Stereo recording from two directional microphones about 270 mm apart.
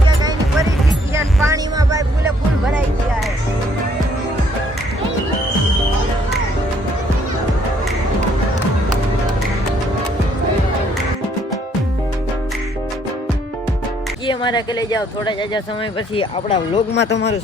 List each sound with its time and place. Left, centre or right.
1.1 s vehicle: centre
2.6 s music: centre
14.3 s speech: centre
16.9 s speech: left